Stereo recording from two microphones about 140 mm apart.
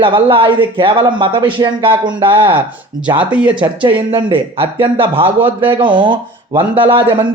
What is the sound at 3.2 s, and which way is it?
Speech, 10° right (ahead or behind).